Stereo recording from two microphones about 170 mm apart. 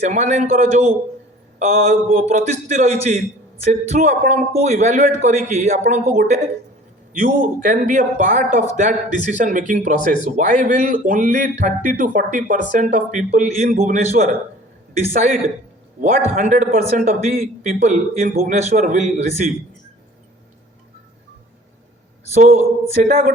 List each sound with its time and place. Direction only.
0.0 s a man's voice: 45° right (ahead or behind)
22.4 s a man's voice: 40° right (ahead or behind)